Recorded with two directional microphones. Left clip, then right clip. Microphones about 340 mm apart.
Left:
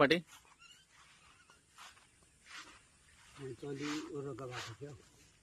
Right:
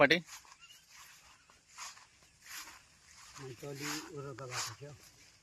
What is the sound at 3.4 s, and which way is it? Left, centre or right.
Speech, right.